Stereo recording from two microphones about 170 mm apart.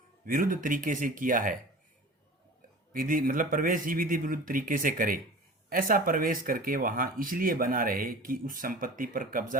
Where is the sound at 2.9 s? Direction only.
55° right (ahead or behind).